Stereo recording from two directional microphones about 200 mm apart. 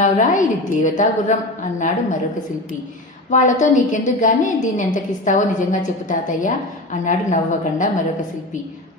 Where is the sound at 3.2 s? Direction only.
40° left (ahead or behind).